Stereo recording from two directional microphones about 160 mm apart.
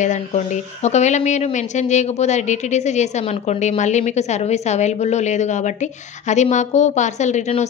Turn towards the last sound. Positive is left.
turn(degrees=45)  # may be behind; listen again after turning